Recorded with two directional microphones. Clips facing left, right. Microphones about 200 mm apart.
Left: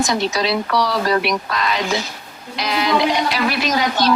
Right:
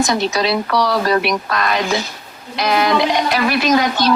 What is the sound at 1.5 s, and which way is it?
A woman's voice, 55° right (ahead or behind).